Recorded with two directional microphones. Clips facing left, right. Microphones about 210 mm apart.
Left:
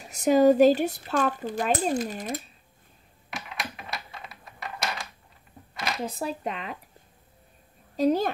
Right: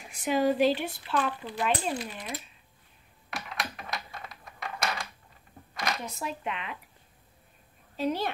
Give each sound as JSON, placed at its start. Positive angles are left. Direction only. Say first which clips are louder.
{"t": 0.0, "sound": "speech", "louder": "left 7 dB", "side_deg": 40}
{"t": 3.3, "sound": "computer keyboard", "louder": "even", "side_deg": 0}
{"t": 6.0, "sound": "speech", "louder": "left 4 dB", "side_deg": 35}
{"t": 7.9, "sound": "speech", "louder": "left 7 dB", "side_deg": 40}